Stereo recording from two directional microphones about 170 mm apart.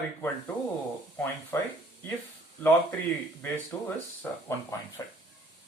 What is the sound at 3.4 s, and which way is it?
Speech, 15° left (ahead or behind).